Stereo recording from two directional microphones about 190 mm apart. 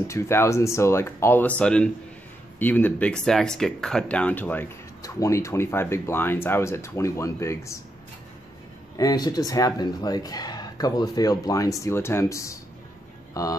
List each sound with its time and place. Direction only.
0.0 s a man's voice: 15° left (ahead or behind)
8.9 s speech: 20° left (ahead or behind)